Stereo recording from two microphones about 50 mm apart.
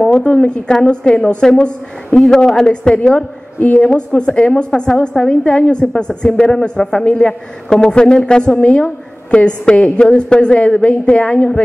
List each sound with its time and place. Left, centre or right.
0.0 s a woman's voice: centre
3.8 s a woman's voice: centre
5.4 s a woman's voice: left